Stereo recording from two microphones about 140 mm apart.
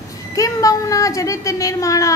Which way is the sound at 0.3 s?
25° left (ahead or behind).